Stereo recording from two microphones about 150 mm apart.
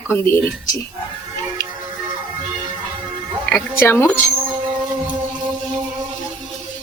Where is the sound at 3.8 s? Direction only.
15° left (ahead or behind).